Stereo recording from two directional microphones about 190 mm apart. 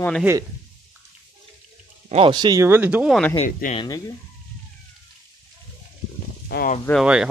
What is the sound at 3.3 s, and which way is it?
Speech, 45° left (ahead or behind).